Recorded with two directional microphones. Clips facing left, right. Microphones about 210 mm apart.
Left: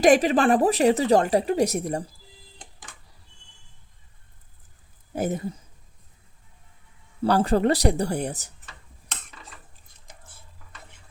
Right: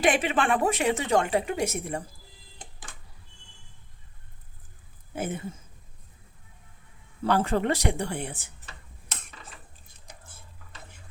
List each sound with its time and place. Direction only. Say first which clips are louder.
0.0 s a woman's voice: left 7 dB; 40° left (ahead or behind)
5.1 s a woman's voice: left 5 dB; 40° left (ahead or behind)
7.2 s a woman's voice: left 4 dB; 35° left (ahead or behind)